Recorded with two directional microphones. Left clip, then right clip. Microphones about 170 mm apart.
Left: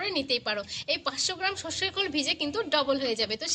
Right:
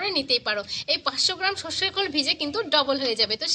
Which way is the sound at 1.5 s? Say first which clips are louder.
Right 4 dB; 5° right (ahead or behind).